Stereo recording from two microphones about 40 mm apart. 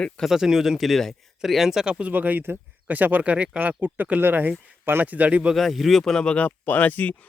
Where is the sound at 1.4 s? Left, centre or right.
Centre.